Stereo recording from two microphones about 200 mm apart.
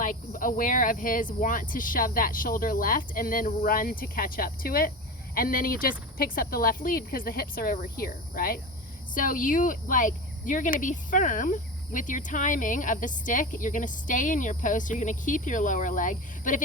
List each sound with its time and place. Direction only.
0.0 s speech: 40° left (ahead or behind)